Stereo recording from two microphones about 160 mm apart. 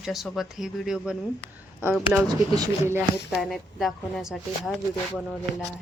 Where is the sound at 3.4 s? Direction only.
Centre (ahead or behind).